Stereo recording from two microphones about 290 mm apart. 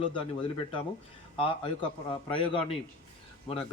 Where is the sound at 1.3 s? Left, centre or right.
Centre.